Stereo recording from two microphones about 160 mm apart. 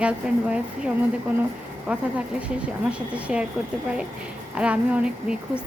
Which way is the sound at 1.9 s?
5° right (ahead or behind).